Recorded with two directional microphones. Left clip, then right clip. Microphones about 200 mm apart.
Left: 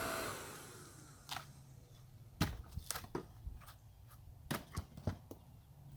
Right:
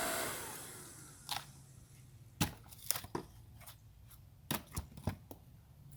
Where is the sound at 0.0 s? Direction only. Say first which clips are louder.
Right 2 dB; 10° right (ahead or behind).